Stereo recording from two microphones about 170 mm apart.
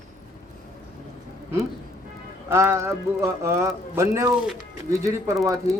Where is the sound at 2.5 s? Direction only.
15° right (ahead or behind).